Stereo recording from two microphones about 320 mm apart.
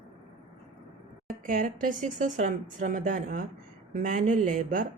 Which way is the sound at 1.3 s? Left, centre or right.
Right.